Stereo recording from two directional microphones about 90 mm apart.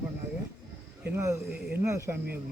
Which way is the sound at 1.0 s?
30° right (ahead or behind).